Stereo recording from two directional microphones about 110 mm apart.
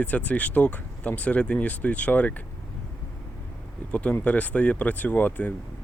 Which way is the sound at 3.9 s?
15° left (ahead or behind).